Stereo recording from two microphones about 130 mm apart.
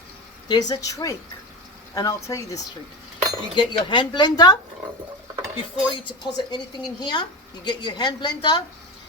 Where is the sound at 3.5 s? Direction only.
35° left (ahead or behind).